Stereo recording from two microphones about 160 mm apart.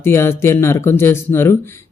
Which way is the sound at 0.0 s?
15° left (ahead or behind).